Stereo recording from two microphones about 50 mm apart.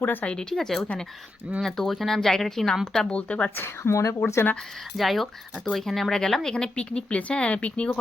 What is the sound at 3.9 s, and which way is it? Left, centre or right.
Speech, left.